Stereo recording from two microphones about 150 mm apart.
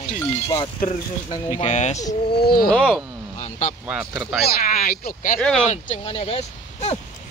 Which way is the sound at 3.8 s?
10° right (ahead or behind).